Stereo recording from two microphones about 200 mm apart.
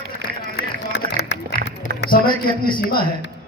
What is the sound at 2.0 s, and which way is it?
Speech, 45° left (ahead or behind).